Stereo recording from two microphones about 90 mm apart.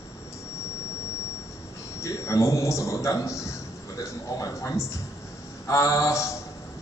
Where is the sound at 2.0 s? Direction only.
35° left (ahead or behind).